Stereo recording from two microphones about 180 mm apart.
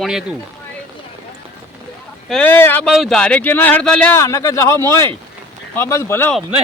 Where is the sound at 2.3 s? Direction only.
10° left (ahead or behind).